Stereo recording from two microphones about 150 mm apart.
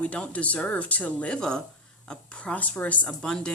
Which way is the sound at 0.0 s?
10° left (ahead or behind).